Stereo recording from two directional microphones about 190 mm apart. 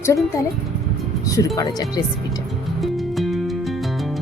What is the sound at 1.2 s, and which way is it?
Speech, 15° left (ahead or behind).